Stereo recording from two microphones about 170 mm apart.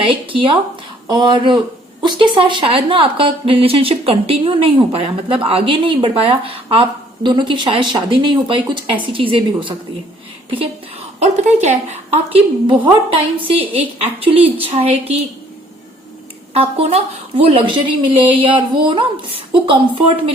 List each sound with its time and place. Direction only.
0.0 s speech: 30° right (ahead or behind)
11.2 s speech: 40° right (ahead or behind)
16.6 s speech: 35° right (ahead or behind)